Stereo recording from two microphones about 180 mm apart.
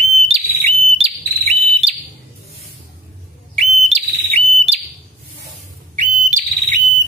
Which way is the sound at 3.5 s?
35° right (ahead or behind).